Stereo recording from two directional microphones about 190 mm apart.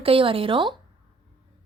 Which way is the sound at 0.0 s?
30° right (ahead or behind).